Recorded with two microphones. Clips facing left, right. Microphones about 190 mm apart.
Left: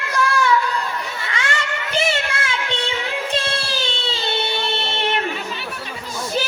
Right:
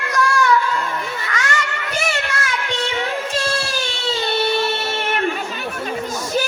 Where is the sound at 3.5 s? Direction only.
25° left (ahead or behind).